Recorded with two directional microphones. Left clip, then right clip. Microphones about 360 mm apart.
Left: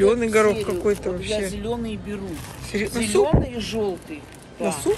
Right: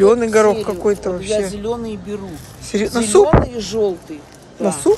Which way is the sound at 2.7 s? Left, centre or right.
Centre.